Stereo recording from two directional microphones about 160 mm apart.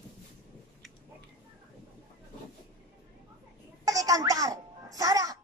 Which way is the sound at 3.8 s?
20° right (ahead or behind).